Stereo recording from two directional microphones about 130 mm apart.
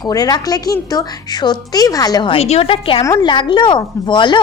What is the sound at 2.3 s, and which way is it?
Speech, 50° left (ahead or behind).